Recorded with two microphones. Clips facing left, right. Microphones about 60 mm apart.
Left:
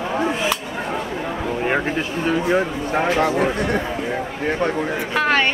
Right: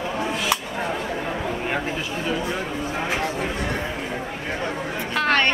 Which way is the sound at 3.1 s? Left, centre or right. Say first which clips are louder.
Left 7 dB; left.